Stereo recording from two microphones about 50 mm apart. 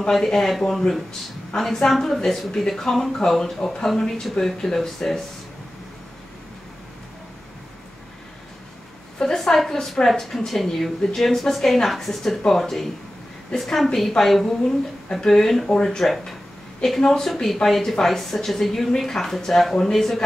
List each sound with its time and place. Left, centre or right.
0.1 s a woman's voice: centre
9.2 s a woman's voice: centre